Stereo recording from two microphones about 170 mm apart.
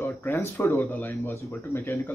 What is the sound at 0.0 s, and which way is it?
Speech, 10° left (ahead or behind).